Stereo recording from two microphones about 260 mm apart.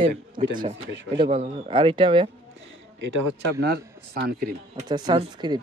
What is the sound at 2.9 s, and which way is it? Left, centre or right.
A man's voice, right.